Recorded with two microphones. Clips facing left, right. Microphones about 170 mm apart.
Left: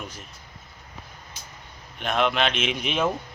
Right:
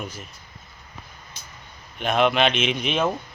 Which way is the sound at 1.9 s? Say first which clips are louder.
Right 4 dB; 5° right (ahead or behind).